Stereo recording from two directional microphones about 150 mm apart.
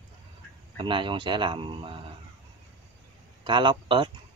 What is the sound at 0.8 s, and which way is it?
A man's voice, 35° right (ahead or behind).